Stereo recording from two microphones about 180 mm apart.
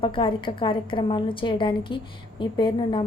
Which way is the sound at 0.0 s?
30° left (ahead or behind).